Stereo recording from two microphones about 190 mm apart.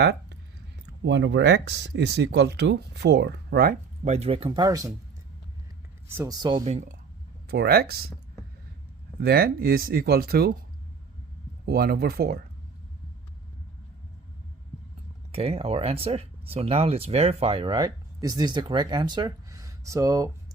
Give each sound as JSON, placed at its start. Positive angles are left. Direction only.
{"t": 0.0, "sound": "speech", "side_deg": -65}
{"t": 4.0, "sound": "speech", "side_deg": -35}
{"t": 6.1, "sound": "speech", "side_deg": -15}
{"t": 6.7, "sound": "speech", "side_deg": -35}
{"t": 7.4, "sound": "speech", "side_deg": -55}
{"t": 9.2, "sound": "speech", "side_deg": -50}
{"t": 11.6, "sound": "speech", "side_deg": -55}
{"t": 15.3, "sound": "speech", "side_deg": -30}